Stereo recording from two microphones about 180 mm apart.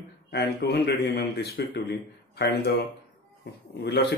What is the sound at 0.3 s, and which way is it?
A man's voice, 70° left (ahead or behind).